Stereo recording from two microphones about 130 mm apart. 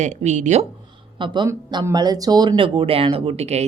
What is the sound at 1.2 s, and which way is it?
A woman's voice, 35° right (ahead or behind).